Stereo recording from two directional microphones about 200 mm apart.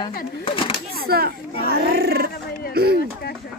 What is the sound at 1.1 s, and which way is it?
Speech, 50° right (ahead or behind).